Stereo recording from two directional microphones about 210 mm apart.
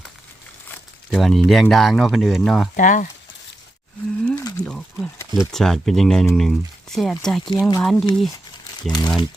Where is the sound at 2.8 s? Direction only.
35° left (ahead or behind).